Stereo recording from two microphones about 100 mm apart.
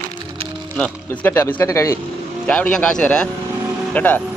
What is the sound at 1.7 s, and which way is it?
Speech, 30° left (ahead or behind).